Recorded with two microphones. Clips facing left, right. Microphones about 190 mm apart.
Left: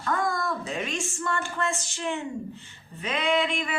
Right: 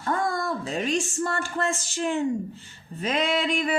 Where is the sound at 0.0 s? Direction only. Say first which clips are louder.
Right 1 dB; 30° right (ahead or behind).